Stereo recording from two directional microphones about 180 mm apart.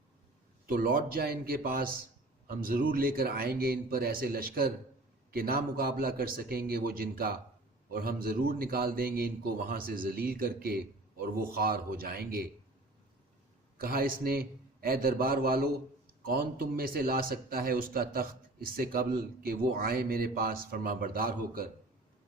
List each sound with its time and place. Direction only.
0.7 s speech: 50° right (ahead or behind)
13.8 s speech: 55° right (ahead or behind)